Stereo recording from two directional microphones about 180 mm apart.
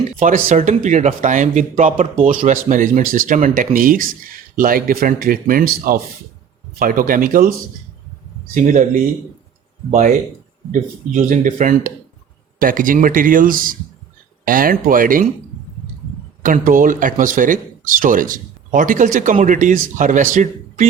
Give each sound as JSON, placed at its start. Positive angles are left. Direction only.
{"t": 0.2, "sound": "speech", "side_deg": -45}
{"t": 8.5, "sound": "speech", "side_deg": -45}
{"t": 9.9, "sound": "speech", "side_deg": -50}
{"t": 16.4, "sound": "speech", "side_deg": -50}